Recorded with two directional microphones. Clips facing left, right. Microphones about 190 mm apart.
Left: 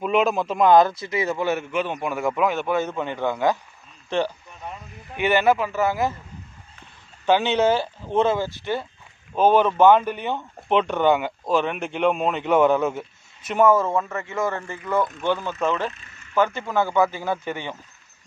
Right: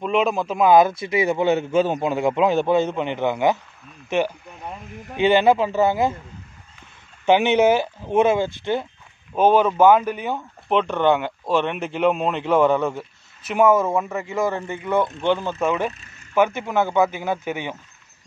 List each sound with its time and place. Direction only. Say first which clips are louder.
0.0 s speech: even; centre (ahead or behind)
0.9 s a man's voice: right 4 dB; 25° right (ahead or behind)
5.1 s a man's voice: right 3 dB; 25° right (ahead or behind)
7.2 s speech: right 3 dB; 15° right (ahead or behind)
13.6 s speech: right 1 dB; 15° right (ahead or behind)